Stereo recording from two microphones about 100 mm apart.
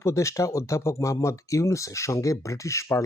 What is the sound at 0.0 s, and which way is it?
Speech, 30° left (ahead or behind).